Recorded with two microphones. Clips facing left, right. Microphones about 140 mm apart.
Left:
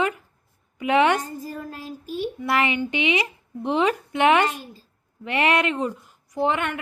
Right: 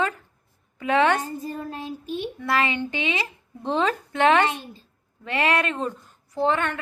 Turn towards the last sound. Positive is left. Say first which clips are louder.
# even
turn(degrees=15)  # may be behind; listen again after turning